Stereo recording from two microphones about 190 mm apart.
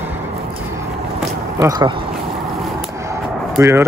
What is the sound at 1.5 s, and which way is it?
Speech, 20° right (ahead or behind).